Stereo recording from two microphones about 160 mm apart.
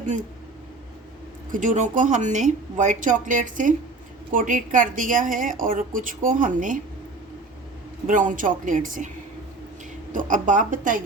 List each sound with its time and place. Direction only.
0.0 s speech: 50° right (ahead or behind)
1.5 s a woman's voice: 55° right (ahead or behind)
8.0 s speech: 55° right (ahead or behind)
10.1 s speech: 55° right (ahead or behind)